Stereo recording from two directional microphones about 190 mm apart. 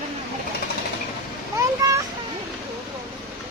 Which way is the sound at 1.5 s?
15° right (ahead or behind).